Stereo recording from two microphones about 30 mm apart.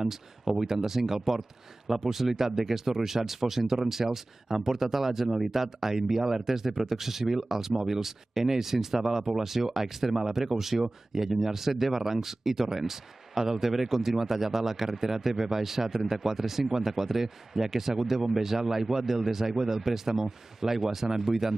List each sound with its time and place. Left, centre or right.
0.5 s speech: centre